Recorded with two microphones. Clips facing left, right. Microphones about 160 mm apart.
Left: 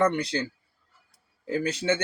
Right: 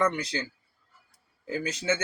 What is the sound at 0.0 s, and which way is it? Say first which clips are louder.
Speech: left 3 dB; 30° left (ahead or behind).